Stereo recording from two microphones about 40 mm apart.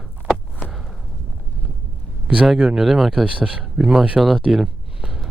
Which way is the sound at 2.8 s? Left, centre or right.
Centre.